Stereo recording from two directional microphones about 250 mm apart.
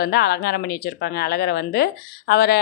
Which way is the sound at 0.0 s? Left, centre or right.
Left.